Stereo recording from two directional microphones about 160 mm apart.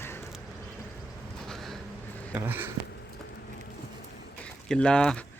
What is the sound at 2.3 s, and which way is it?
Speech, 10° right (ahead or behind).